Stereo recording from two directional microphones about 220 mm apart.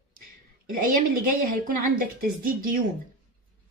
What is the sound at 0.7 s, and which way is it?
A woman's voice, 40° right (ahead or behind).